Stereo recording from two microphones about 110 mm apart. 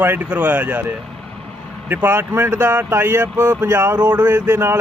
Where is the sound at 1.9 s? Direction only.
20° right (ahead or behind).